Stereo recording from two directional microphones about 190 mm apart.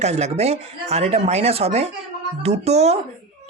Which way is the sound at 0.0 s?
35° right (ahead or behind).